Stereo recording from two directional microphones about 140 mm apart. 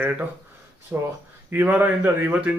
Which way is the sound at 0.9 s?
10° right (ahead or behind).